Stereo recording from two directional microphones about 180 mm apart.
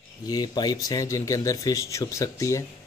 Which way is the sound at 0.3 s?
20° left (ahead or behind).